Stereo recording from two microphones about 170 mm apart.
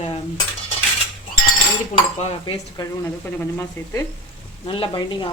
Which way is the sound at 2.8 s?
15° left (ahead or behind).